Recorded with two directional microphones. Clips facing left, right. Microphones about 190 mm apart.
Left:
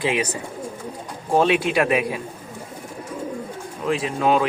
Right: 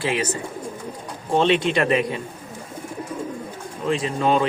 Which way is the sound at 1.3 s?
5° left (ahead or behind).